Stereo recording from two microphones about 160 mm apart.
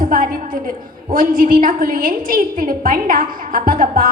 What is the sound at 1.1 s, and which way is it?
A woman's voice, 60° right (ahead or behind).